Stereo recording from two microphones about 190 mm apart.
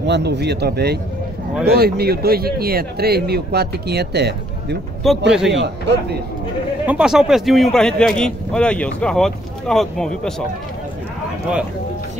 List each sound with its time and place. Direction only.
0.0 s speech: 65° right (ahead or behind)
5.0 s speech: centre (ahead or behind)
5.5 s speech: 65° right (ahead or behind)
6.9 s speech: 5° right (ahead or behind)